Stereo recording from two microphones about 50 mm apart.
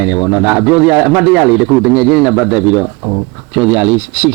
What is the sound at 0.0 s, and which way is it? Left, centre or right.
Speech, centre.